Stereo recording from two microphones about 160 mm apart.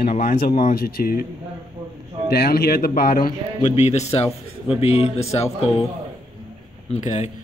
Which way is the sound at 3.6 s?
45° left (ahead or behind).